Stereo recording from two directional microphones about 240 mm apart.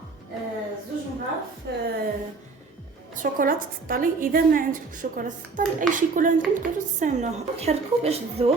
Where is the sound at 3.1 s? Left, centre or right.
Right.